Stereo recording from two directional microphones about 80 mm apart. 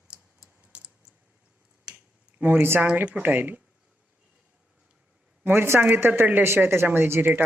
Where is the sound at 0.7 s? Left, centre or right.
Centre.